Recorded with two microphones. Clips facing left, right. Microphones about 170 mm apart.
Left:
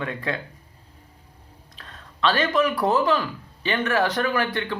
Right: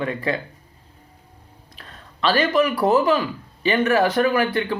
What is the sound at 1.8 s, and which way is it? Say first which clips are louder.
Speech: left 1 dB; 5° right (ahead or behind).